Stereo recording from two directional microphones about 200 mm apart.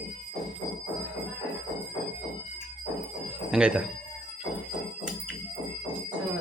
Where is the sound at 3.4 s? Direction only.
5° right (ahead or behind).